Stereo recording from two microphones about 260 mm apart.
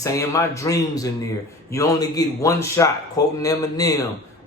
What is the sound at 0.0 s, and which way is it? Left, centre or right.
A man's voice, centre.